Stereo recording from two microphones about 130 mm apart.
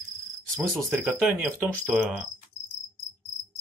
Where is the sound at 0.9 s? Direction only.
10° right (ahead or behind).